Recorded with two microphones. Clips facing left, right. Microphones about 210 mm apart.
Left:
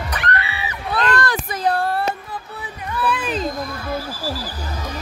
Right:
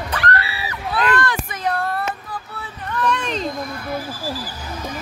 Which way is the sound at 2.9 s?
5° left (ahead or behind).